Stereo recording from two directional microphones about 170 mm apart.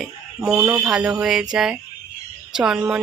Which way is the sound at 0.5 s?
15° right (ahead or behind).